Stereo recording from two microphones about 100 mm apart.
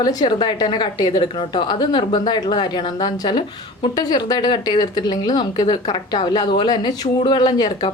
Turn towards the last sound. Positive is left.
turn(degrees=45)  # may be behind; listen again after turning